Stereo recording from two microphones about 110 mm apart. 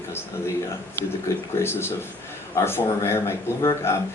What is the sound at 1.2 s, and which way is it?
A man's voice, 20° left (ahead or behind).